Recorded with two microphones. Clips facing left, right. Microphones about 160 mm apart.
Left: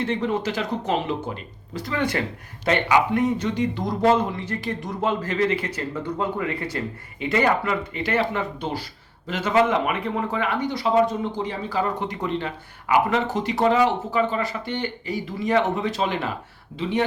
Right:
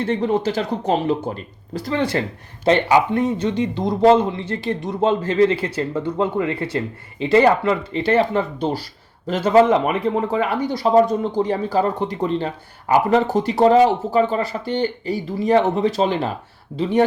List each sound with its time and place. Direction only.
0.0 s speech: 35° right (ahead or behind)